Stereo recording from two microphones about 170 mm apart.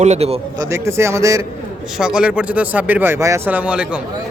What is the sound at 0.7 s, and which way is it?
Speech, 15° right (ahead or behind).